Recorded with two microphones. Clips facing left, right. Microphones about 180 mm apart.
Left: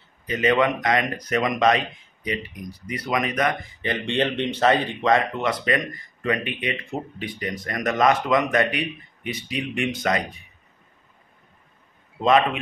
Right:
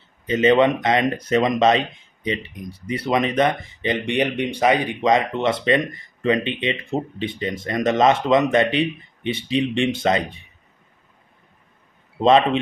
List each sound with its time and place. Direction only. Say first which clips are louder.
0.3 s speech: right 5 dB; 25° right (ahead or behind)
12.2 s speech: right 3 dB; 30° right (ahead or behind)